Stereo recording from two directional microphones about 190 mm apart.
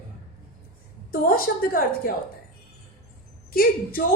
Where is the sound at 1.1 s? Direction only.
50° left (ahead or behind).